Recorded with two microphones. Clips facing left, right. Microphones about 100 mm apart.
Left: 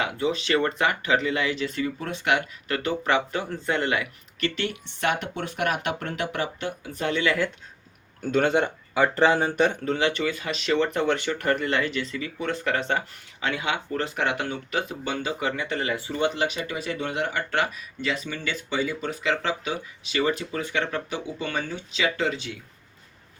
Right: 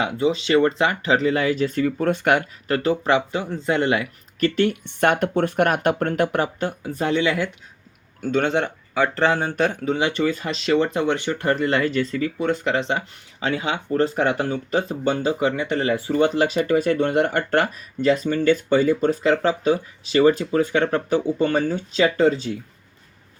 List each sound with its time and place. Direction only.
0.0 s speech: 25° right (ahead or behind)
4.4 s speech: 45° right (ahead or behind)
8.2 s speech: centre (ahead or behind)
10.0 s speech: 30° right (ahead or behind)
10.7 s speech: 25° right (ahead or behind)
12.5 s speech: 20° right (ahead or behind); by 22.5 s 40° right (ahead or behind)